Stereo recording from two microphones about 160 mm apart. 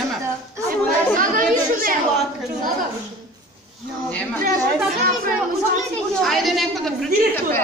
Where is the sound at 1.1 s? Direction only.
60° right (ahead or behind).